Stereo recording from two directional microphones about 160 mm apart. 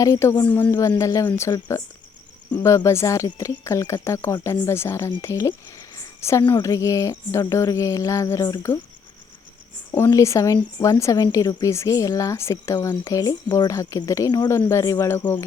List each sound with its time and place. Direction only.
0.0 s speech: 20° left (ahead or behind)
6.0 s cricket: 20° left (ahead or behind)
6.5 s a woman's voice: 20° left (ahead or behind)
9.9 s a woman's voice: 20° left (ahead or behind)